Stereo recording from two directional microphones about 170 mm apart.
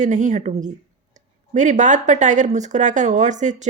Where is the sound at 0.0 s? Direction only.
45° right (ahead or behind).